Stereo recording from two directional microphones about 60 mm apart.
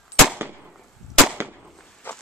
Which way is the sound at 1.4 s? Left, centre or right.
Right.